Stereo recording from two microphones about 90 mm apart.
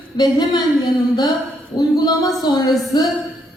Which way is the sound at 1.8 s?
50° left (ahead or behind).